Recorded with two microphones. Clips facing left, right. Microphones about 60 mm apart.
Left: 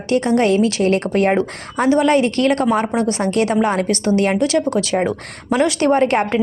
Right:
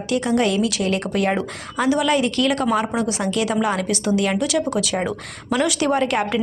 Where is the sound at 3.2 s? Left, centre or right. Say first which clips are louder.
Left 4 dB; left.